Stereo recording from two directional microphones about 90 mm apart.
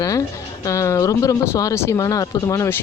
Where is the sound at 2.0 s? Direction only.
40° left (ahead or behind).